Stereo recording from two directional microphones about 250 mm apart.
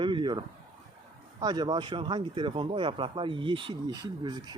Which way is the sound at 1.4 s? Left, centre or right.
Centre.